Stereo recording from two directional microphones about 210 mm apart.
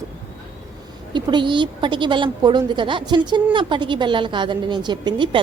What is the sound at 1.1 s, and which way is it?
A woman's voice, 20° right (ahead or behind).